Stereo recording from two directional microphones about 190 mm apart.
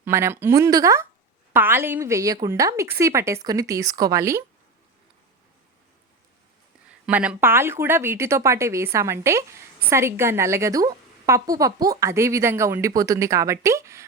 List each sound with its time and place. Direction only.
0.0 s speech: 15° right (ahead or behind)
7.0 s speech: 5° right (ahead or behind)